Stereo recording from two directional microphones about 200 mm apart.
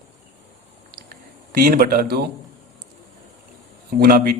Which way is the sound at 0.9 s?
50° right (ahead or behind).